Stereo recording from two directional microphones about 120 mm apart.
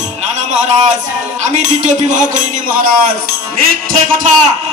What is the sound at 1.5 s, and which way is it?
Speech, 85° right.